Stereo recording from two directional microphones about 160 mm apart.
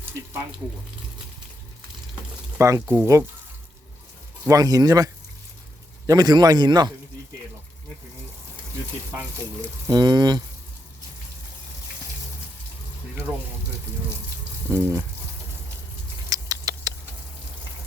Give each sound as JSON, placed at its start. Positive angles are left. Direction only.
{"t": 2.6, "sound": "speech", "side_deg": -20}
{"t": 4.4, "sound": "a man's voice", "side_deg": -20}
{"t": 9.8, "sound": "a man's voice", "side_deg": -25}
{"t": 14.7, "sound": "speech", "side_deg": -15}
{"t": 16.3, "sound": "rodents", "side_deg": -20}